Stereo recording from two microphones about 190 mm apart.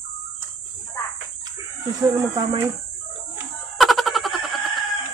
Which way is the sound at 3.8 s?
Centre (ahead or behind).